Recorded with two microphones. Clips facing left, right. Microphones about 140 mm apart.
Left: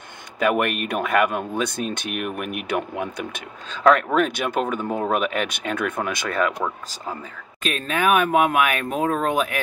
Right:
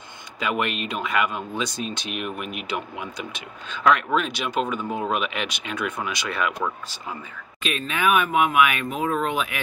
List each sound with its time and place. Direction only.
0.4 s speech: 55° left (ahead or behind)
3.6 s speech: 40° left (ahead or behind)
7.6 s speech: 45° left (ahead or behind)